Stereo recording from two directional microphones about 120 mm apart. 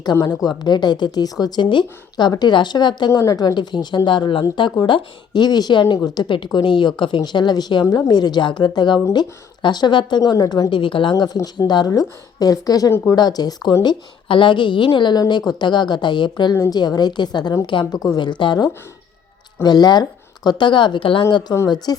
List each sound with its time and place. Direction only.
0.0 s a woman's voice: 35° left (ahead or behind)
10.7 s a woman's voice: 45° left (ahead or behind)